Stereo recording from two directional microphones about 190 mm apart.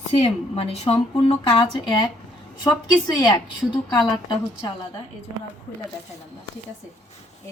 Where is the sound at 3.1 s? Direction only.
20° left (ahead or behind).